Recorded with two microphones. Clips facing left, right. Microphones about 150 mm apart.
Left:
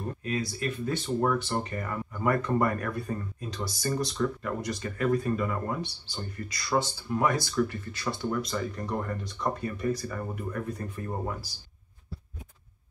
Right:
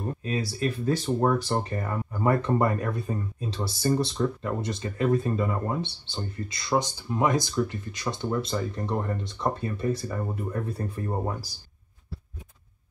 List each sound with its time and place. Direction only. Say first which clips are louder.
0.2 s speech: right 3 dB; 30° right (ahead or behind)